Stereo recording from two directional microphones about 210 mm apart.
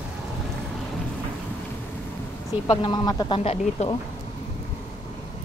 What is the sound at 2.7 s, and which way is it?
Speech, 20° left (ahead or behind).